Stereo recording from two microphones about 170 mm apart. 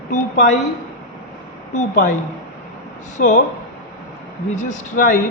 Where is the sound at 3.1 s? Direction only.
45° left (ahead or behind).